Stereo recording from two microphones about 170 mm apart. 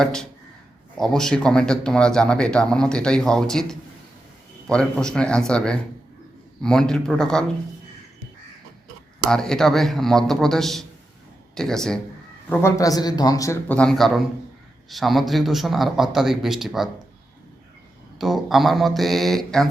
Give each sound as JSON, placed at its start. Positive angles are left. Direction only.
{"t": 0.0, "sound": "a man's voice", "side_deg": 5}
{"t": 9.3, "sound": "a man's voice", "side_deg": 5}
{"t": 12.5, "sound": "a man's voice", "side_deg": 15}
{"t": 18.2, "sound": "a man's voice", "side_deg": 0}